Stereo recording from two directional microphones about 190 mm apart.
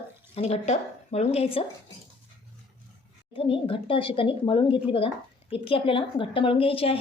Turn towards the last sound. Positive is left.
turn(degrees=30)  # may be behind; listen again after turning